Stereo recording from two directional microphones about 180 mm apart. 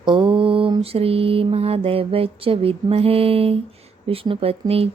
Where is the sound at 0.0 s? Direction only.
25° right (ahead or behind).